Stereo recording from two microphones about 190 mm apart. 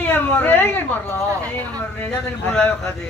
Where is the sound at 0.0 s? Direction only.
10° left (ahead or behind).